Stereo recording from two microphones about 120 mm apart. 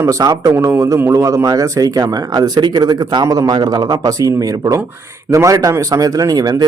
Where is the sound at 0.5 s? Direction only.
15° right (ahead or behind).